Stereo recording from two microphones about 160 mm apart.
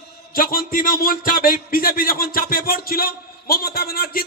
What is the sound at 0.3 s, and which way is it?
A man's voice, 65° left (ahead or behind).